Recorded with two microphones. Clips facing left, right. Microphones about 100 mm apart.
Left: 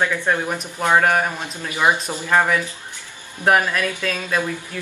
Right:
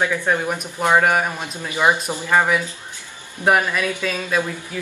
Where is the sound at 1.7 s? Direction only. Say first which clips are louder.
Right 1 dB; 15° right (ahead or behind).